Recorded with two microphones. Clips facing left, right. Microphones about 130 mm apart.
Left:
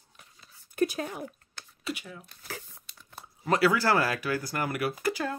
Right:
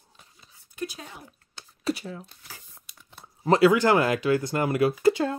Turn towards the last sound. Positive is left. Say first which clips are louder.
# right 8 dB
turn(degrees=-25)  # may be behind; listen again after turning